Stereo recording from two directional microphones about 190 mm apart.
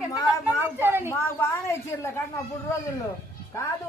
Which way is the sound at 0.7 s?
10° right (ahead or behind).